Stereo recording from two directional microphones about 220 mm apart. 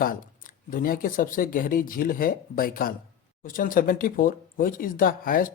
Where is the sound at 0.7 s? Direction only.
40° left (ahead or behind).